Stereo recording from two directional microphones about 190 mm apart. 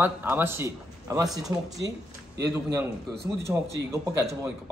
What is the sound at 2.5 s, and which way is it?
A man's voice, 15° right (ahead or behind).